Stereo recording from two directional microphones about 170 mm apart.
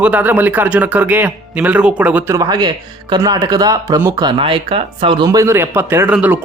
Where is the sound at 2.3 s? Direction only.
20° right (ahead or behind).